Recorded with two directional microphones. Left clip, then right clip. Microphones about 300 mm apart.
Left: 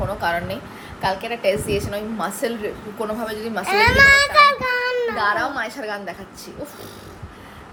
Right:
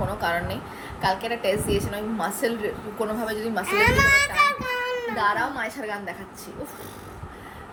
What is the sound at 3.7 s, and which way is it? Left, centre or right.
A child's voice, left.